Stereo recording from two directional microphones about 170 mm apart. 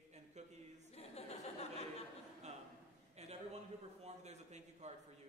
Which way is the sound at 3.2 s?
40° right (ahead or behind).